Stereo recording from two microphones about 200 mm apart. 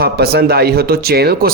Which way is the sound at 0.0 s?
50° right (ahead or behind).